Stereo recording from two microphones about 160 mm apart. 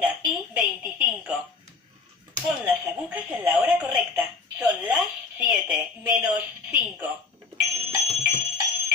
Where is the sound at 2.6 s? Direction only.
10° right (ahead or behind).